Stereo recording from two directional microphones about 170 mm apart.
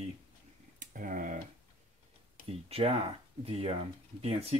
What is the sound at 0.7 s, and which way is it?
Speech, 50° right (ahead or behind).